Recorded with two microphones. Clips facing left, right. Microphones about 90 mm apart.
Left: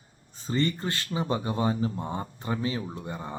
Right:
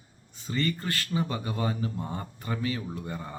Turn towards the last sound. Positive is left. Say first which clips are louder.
# left 1 dB
turn(degrees=20)  # may be behind; listen again after turning